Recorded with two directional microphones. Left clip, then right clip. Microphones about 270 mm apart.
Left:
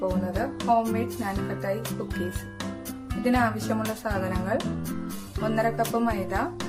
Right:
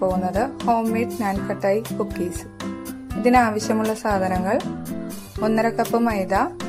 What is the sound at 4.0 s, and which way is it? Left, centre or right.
Speech, right.